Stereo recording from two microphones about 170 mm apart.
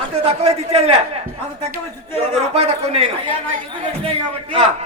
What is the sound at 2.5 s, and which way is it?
Speech, 35° right (ahead or behind).